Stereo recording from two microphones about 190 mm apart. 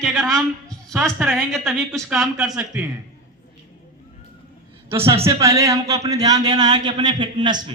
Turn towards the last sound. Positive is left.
turn(degrees=-25)  # may be behind; listen again after turning